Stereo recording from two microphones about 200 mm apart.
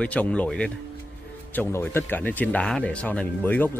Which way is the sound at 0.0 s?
5° left (ahead or behind).